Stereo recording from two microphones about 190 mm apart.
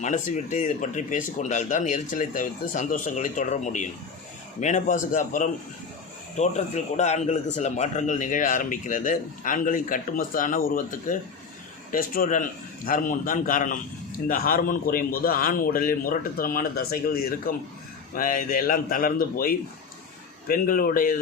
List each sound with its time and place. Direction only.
0.0 s speech: 40° left (ahead or behind)